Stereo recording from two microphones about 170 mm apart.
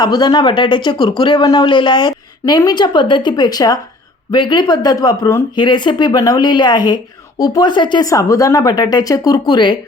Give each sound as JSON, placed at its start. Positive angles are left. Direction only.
{"t": 0.0, "sound": "speech", "side_deg": 25}